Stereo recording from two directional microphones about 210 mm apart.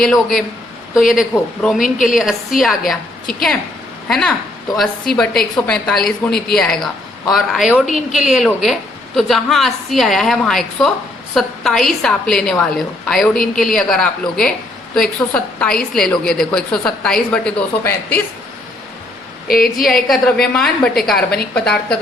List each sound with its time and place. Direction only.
0.0 s a woman's voice: centre (ahead or behind)
19.5 s a woman's voice: 45° left (ahead or behind)
19.7 s a woman's voice: centre (ahead or behind)